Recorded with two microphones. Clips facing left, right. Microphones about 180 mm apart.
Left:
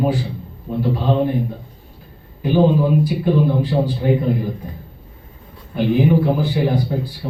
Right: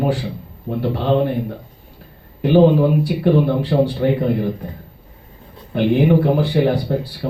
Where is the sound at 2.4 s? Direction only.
75° right (ahead or behind).